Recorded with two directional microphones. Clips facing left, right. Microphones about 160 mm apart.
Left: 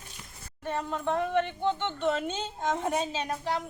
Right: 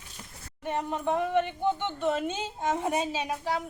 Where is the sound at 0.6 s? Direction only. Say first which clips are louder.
Right 1 dB; 15° right (ahead or behind).